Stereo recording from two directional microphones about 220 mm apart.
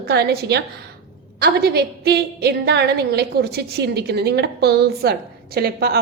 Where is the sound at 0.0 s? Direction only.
45° right (ahead or behind).